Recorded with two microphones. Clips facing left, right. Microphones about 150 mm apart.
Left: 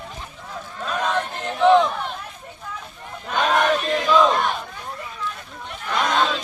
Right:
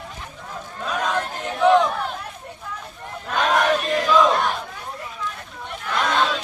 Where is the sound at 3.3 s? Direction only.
Centre (ahead or behind).